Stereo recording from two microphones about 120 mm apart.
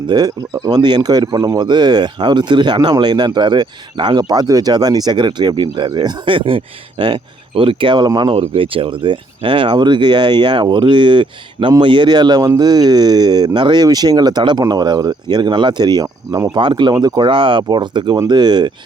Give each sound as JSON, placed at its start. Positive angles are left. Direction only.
{"t": 0.1, "sound": "speech", "side_deg": -35}
{"t": 8.4, "sound": "speech", "side_deg": -50}